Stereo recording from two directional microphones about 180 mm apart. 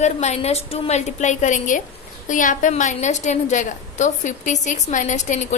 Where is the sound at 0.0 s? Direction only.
40° left (ahead or behind).